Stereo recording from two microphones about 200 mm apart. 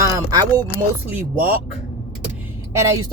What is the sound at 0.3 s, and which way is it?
Speech, 20° right (ahead or behind).